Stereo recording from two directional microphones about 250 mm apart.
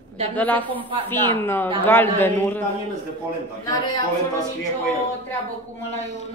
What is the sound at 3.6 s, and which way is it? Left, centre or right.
Speech, centre.